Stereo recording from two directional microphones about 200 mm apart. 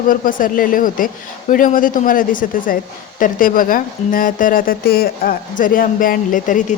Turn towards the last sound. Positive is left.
turn(degrees=40)  # may be behind; listen again after turning